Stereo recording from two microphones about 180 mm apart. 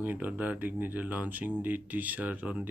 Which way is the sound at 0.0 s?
10° right (ahead or behind).